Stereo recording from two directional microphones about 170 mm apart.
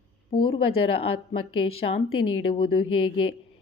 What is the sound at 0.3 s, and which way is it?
Speech, 30° left (ahead or behind).